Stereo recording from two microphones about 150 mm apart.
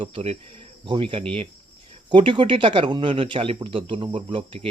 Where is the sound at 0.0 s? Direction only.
40° right (ahead or behind).